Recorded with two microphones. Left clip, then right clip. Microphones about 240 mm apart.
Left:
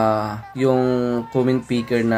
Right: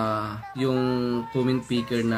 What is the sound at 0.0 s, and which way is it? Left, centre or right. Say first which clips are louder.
Speech: left 8 dB; centre.